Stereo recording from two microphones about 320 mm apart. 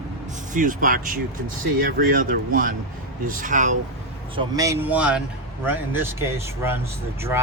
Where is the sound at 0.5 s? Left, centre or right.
Right.